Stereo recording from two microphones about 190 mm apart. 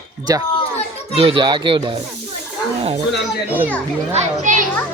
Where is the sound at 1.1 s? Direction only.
30° right (ahead or behind).